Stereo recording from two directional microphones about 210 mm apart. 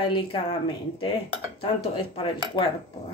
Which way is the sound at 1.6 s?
25° left (ahead or behind).